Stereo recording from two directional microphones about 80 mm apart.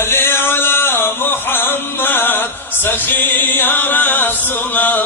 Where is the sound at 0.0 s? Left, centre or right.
Left.